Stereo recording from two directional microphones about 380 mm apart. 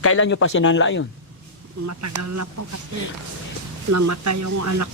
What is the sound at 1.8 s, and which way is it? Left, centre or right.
Speech, right.